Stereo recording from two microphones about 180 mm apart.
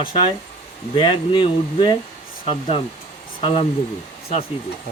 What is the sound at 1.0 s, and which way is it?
A man's voice, 30° left (ahead or behind).